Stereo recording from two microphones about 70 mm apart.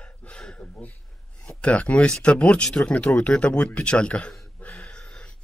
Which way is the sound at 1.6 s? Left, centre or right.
Centre.